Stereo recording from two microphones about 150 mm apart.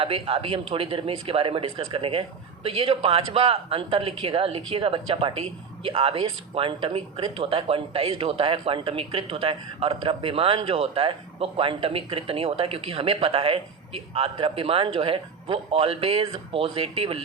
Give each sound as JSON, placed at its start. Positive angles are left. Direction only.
{"t": 0.0, "sound": "speech", "side_deg": -40}